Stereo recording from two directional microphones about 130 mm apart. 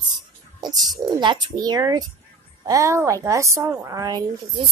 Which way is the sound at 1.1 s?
35° right (ahead or behind).